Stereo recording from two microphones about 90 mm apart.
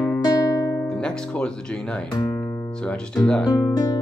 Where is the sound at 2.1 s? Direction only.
35° left (ahead or behind).